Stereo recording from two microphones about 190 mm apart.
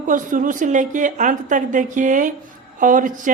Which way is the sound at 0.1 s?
45° right (ahead or behind).